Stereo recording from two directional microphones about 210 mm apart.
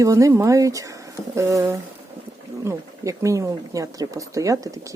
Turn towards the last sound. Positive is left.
turn(degrees=-15)  # may be behind; listen again after turning